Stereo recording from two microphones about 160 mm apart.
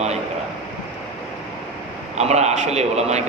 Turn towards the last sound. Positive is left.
turn(degrees=-45)  # may be behind; listen again after turning